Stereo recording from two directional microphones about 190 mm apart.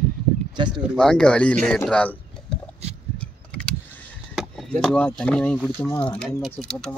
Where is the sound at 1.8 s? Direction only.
10° left (ahead or behind).